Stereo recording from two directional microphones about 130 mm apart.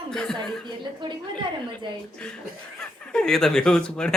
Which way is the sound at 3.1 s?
5° left (ahead or behind).